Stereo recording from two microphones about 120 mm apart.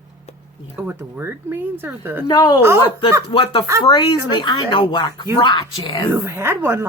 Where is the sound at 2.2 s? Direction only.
35° left (ahead or behind).